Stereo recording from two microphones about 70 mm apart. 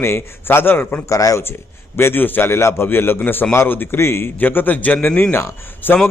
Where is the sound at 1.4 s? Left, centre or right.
Left.